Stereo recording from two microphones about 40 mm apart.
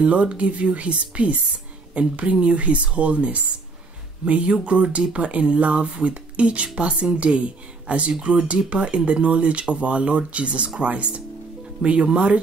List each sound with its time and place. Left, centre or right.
0.0 s speech: right